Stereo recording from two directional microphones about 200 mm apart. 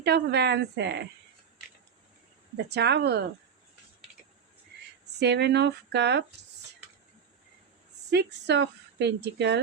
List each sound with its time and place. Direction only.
0.0 s a woman's voice: 55° right (ahead or behind)
2.6 s a woman's voice: 55° right (ahead or behind)
4.7 s a sound: 55° right (ahead or behind)
5.2 s a woman's voice: 55° right (ahead or behind)
8.1 s a woman's voice: 55° right (ahead or behind)